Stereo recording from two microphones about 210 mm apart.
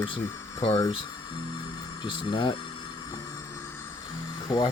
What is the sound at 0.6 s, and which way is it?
Music, 25° left (ahead or behind).